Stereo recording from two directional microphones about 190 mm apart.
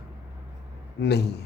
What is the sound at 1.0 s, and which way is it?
Speech, 60° left (ahead or behind).